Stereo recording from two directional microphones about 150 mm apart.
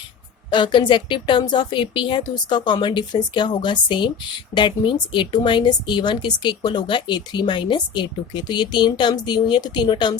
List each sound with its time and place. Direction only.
0.5 s speech: 30° left (ahead or behind)